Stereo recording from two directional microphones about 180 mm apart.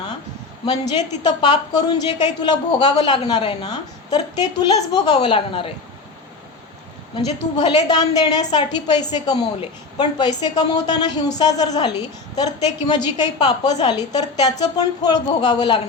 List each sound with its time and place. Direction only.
1.2 s a woman's voice: 25° left (ahead or behind)
7.5 s a woman's voice: 25° left (ahead or behind)